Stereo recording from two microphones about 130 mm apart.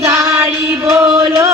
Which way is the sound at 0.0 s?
20° right (ahead or behind).